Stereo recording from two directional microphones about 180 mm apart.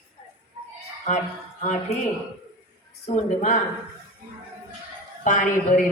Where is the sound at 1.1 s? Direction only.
40° left (ahead or behind).